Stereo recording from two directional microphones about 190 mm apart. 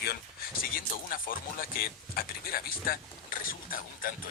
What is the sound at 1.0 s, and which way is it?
Speech, 50° left (ahead or behind).